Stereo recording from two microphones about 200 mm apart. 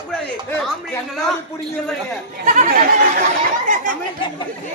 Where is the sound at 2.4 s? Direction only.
40° right (ahead or behind).